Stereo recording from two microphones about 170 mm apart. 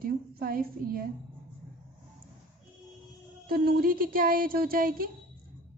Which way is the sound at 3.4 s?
65° right (ahead or behind).